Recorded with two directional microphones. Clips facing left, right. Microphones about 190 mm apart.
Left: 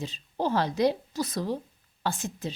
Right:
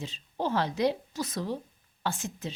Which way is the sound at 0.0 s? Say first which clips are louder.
Left 3 dB; 35° left (ahead or behind).